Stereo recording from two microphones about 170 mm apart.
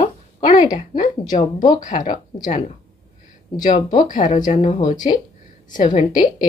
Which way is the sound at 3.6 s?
50° left (ahead or behind).